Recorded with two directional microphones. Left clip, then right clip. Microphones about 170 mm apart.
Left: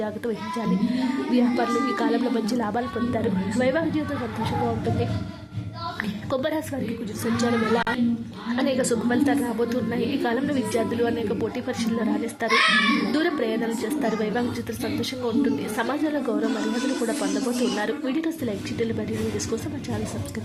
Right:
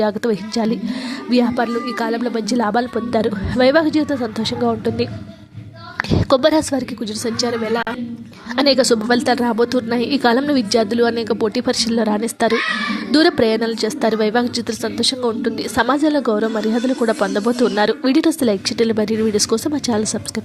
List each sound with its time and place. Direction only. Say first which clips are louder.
0.0 s a woman's voice: right 10 dB; 35° right (ahead or behind)
6.3 s a woman's voice: right 12 dB; 35° right (ahead or behind)
8.5 s a woman's voice: right 10 dB; 35° right (ahead or behind)
15.7 s a woman's voice: right 9 dB; 35° right (ahead or behind)
17.7 s a woman's voice: right 10 dB; 35° right (ahead or behind)